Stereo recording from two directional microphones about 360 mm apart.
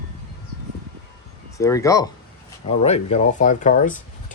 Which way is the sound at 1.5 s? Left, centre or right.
Centre.